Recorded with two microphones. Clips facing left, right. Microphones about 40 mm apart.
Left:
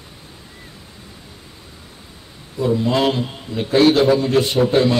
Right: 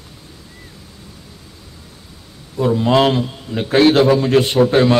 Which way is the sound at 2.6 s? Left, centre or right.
Right.